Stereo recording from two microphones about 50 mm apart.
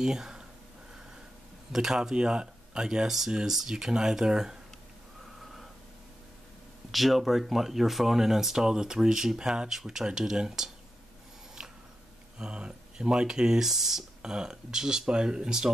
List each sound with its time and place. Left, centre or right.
0.0 s speech: centre
1.7 s speech: centre
5.4 s a sound: centre
6.9 s speech: centre
12.4 s speech: centre